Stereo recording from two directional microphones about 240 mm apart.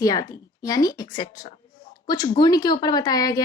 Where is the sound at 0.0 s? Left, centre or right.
Centre.